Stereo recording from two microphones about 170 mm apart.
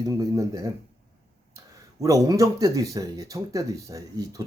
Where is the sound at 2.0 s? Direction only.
20° right (ahead or behind).